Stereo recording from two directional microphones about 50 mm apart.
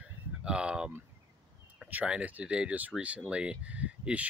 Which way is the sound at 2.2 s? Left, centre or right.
Right.